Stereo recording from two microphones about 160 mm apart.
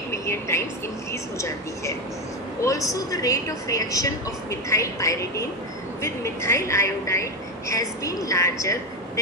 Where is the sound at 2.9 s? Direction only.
20° left (ahead or behind).